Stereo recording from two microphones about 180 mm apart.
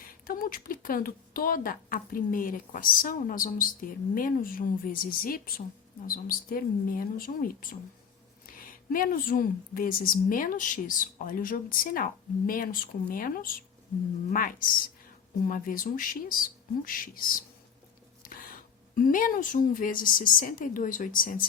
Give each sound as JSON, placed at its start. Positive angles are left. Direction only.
{"t": 0.3, "sound": "speech", "side_deg": 50}
{"t": 18.2, "sound": "a sound", "side_deg": 50}
{"t": 18.9, "sound": "speech", "side_deg": 50}